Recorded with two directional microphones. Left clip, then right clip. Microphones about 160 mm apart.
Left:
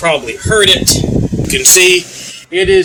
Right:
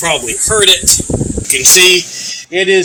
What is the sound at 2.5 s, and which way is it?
Speech, 45° right (ahead or behind).